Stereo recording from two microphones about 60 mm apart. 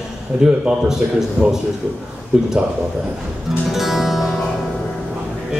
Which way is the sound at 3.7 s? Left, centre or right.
Centre.